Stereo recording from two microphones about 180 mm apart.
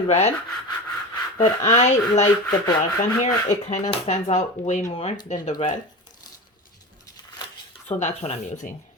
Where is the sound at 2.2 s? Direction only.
20° left (ahead or behind).